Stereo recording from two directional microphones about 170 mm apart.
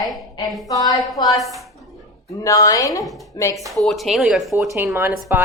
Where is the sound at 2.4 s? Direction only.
20° left (ahead or behind).